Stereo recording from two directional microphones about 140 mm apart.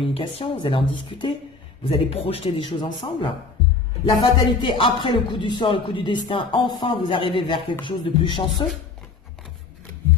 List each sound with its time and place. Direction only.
0.0 s speech: 40° left (ahead or behind)